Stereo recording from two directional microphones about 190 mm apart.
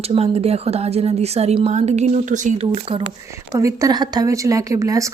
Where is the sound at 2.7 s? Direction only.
25° right (ahead or behind).